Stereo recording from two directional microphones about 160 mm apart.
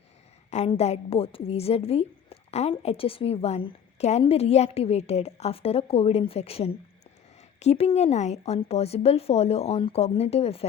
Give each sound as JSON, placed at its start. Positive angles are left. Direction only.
{"t": 0.5, "sound": "a woman's voice", "side_deg": 40}